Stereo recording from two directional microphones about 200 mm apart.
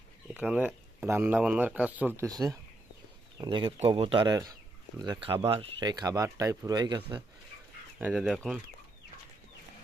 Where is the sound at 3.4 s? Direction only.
25° right (ahead or behind).